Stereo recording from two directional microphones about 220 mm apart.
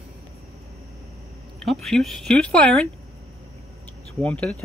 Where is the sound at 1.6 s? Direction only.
Centre (ahead or behind).